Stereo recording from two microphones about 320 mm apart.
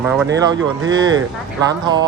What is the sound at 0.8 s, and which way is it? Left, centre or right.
Speech, right.